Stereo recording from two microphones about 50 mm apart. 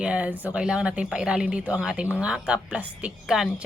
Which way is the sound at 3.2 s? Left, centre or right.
Centre.